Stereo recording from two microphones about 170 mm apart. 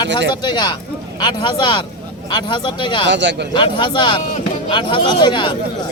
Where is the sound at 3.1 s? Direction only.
90° right.